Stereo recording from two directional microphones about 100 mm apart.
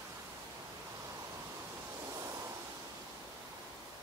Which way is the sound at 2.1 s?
35° right (ahead or behind).